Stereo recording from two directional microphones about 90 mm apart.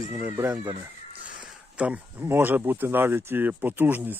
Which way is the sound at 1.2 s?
15° right (ahead or behind).